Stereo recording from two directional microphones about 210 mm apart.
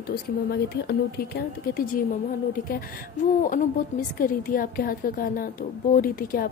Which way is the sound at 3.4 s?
40° left (ahead or behind).